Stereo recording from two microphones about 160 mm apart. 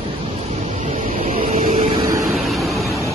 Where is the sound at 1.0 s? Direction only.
55° right (ahead or behind).